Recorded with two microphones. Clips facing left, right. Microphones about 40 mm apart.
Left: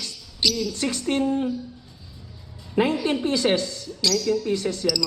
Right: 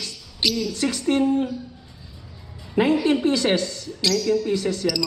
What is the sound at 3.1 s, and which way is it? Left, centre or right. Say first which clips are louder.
Speech: right 2 dB; centre.